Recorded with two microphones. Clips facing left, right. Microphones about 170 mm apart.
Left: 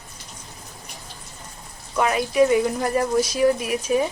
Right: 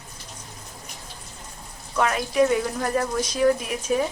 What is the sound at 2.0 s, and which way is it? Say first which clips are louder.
Speech: left 2 dB; 5° left (ahead or behind).